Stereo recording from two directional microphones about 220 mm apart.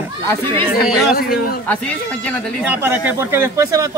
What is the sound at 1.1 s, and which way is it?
Speech, 45° left (ahead or behind).